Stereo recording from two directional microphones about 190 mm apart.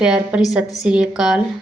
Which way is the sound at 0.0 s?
5° right (ahead or behind).